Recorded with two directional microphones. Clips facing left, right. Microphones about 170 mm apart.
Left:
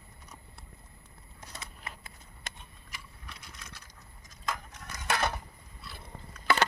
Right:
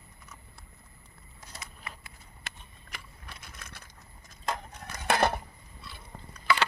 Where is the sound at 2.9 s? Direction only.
55° right (ahead or behind).